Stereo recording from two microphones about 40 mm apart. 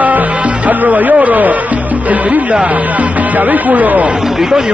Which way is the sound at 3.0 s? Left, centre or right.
Right.